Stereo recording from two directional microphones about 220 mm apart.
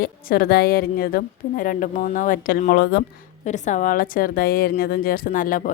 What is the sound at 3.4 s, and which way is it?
A woman's voice, 35° left (ahead or behind).